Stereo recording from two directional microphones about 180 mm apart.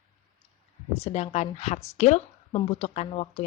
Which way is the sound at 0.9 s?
35° left (ahead or behind).